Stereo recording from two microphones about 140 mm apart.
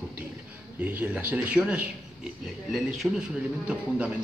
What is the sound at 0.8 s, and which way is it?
A man's voice, 10° right (ahead or behind).